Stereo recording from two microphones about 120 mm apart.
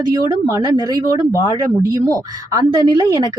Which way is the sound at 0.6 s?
35° right (ahead or behind).